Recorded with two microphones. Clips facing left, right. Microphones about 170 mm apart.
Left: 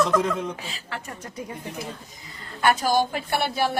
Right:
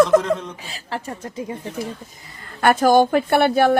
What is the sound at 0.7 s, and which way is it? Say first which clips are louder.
Speech: right 6 dB; 35° right (ahead or behind).